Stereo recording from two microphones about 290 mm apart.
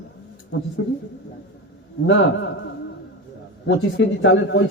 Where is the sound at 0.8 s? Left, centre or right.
Left.